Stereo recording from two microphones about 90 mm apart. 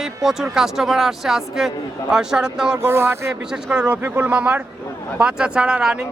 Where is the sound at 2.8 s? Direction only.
25° right (ahead or behind).